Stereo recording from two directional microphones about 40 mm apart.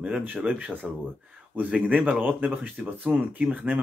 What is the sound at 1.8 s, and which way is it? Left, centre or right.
Speech, right.